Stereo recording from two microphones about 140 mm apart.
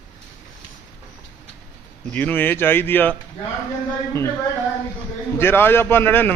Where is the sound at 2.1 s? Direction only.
15° left (ahead or behind).